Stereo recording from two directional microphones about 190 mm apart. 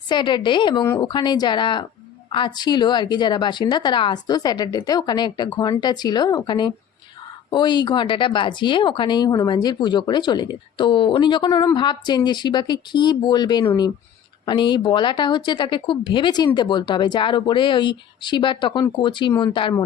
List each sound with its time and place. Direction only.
0.1 s speech: 25° left (ahead or behind)